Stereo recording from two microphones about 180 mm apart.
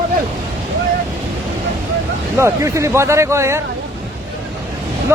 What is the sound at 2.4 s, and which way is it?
Speech, 15° right (ahead or behind).